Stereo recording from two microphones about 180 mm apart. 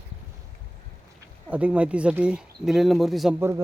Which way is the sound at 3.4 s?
15° right (ahead or behind).